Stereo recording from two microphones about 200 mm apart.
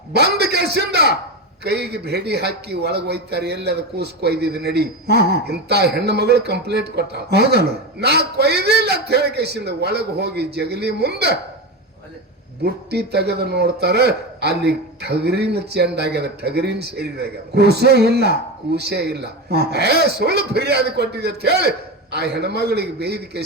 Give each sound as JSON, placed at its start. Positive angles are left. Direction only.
{"t": 0.1, "sound": "a sound", "side_deg": -55}
{"t": 1.6, "sound": "a man's voice", "side_deg": -55}
{"t": 12.6, "sound": "a man's voice", "side_deg": -55}